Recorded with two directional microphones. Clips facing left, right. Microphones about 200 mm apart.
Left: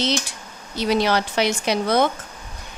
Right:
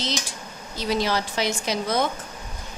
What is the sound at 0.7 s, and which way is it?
A woman's voice, 65° left (ahead or behind).